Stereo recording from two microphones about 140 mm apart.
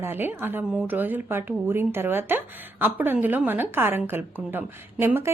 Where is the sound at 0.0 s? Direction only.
15° right (ahead or behind).